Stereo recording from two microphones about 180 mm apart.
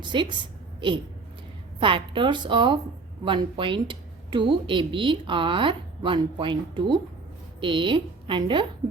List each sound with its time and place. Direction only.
0.0 s speech: 25° right (ahead or behind)